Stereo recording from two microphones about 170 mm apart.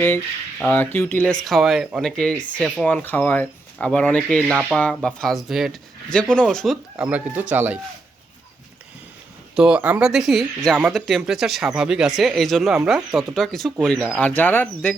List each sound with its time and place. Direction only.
0.6 s speech: 10° left (ahead or behind); by 7.8 s 10° right (ahead or behind)
9.6 s speech: 5° right (ahead or behind); by 14.9 s 10° left (ahead or behind)